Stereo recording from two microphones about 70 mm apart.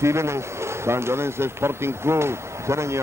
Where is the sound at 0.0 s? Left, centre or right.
Right.